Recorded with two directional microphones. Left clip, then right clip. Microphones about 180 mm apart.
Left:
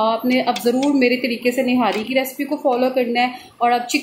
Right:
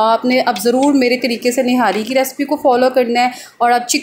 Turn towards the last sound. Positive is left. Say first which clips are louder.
# right 4 dB
turn(degrees=-20)  # may be behind; listen again after turning